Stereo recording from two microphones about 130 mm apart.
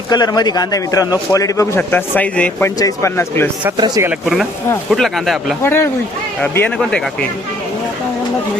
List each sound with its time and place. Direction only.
0.1 s a man's voice: 30° left (ahead or behind); by 2.6 s 10° left (ahead or behind)
2.6 s a man's voice: 25° left (ahead or behind)
3.8 s speech: 35° right (ahead or behind)
4.9 s speech: centre (ahead or behind)
5.6 s speech: 20° left (ahead or behind)